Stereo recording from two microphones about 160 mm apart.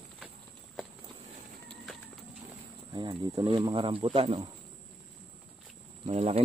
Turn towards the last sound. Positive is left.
turn(degrees=-40)  # may be behind; listen again after turning